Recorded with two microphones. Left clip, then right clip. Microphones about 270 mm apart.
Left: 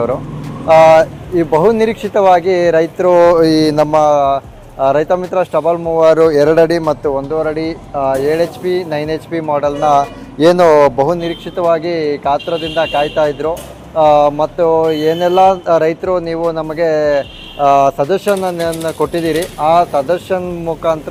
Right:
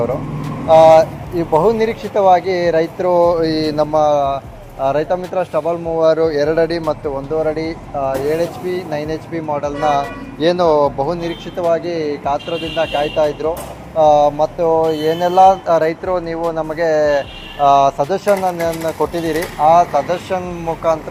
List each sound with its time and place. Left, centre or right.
0.7 s speech: left